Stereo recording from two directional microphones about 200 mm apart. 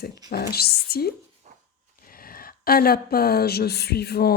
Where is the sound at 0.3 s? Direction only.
50° left (ahead or behind).